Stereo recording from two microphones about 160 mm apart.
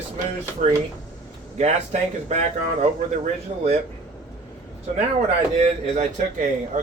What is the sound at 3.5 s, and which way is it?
Speech, 45° right (ahead or behind).